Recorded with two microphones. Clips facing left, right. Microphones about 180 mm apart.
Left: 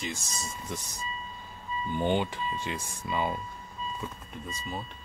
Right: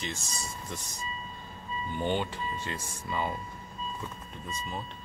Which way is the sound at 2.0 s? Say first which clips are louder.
Left 3 dB; 15° left (ahead or behind).